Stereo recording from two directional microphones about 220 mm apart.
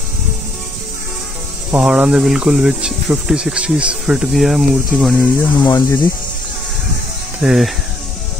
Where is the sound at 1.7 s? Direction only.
5° right (ahead or behind).